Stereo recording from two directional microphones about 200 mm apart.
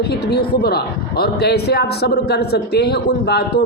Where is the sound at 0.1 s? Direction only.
55° left (ahead or behind).